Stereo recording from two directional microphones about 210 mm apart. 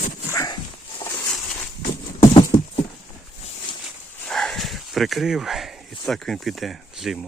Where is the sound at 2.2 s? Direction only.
25° left (ahead or behind).